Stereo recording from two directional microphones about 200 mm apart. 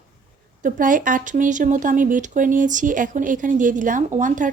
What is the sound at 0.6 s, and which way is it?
A woman's voice, 40° right (ahead or behind).